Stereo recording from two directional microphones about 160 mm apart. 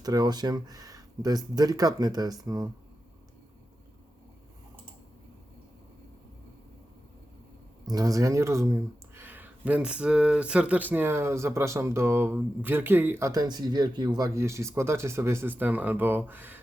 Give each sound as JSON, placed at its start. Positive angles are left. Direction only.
{"t": 0.0, "sound": "speech", "side_deg": -25}
{"t": 7.9, "sound": "speech", "side_deg": -20}